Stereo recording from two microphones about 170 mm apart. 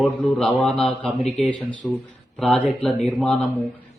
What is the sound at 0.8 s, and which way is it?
Speech, 35° left (ahead or behind).